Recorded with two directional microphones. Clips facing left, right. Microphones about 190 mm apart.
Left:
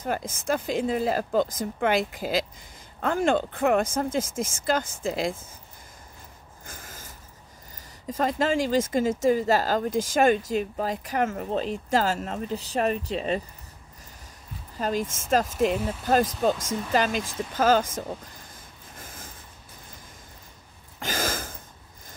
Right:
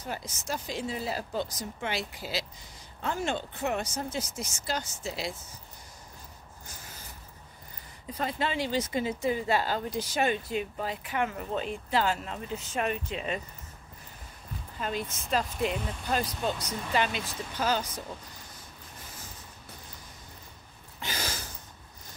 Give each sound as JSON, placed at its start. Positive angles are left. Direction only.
{"t": 0.0, "sound": "speech", "side_deg": 50}
{"t": 6.6, "sound": "a sound", "side_deg": 50}
{"t": 8.1, "sound": "speech", "side_deg": 45}
{"t": 14.8, "sound": "speech", "side_deg": 40}
{"t": 21.0, "sound": "gasp", "side_deg": 45}